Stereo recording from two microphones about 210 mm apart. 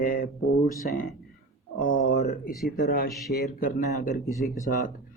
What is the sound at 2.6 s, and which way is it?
Speech, 45° left (ahead or behind).